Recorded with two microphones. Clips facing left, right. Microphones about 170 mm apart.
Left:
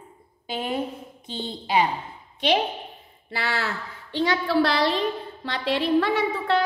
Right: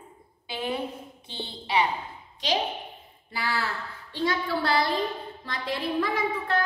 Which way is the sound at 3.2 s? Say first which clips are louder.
Left 2 dB; 85° left.